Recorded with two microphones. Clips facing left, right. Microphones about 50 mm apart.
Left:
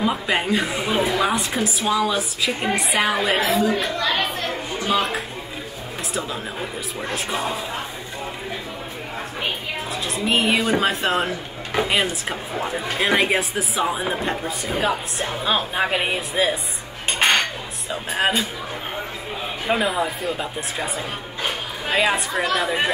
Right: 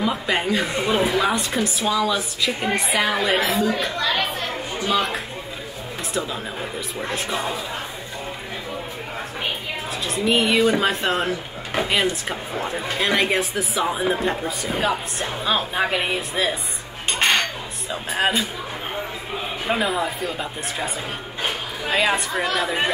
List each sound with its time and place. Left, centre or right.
0.0 s speech: centre
1.9 s speech: centre
3.3 s speech: left
6.1 s speech: centre
10.0 s speech: centre
17.2 s cutlery: centre
18.1 s speech: centre
19.7 s speech: centre
21.5 s chatter: centre
22.6 s speech: centre